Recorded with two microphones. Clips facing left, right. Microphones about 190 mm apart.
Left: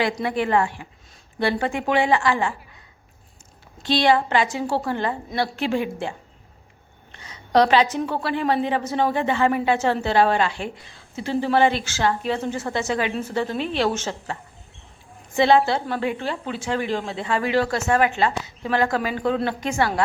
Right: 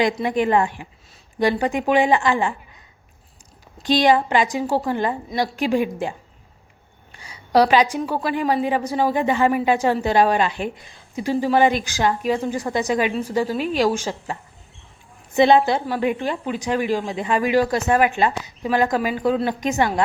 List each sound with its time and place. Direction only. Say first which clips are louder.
0.0 s a woman's voice: right 3 dB; 20° right (ahead or behind)
3.8 s a woman's voice: right 2 dB; 15° right (ahead or behind)
7.2 s a woman's voice: right 1 dB; 10° right (ahead or behind)
15.4 s a woman's voice: right 2 dB; 20° right (ahead or behind)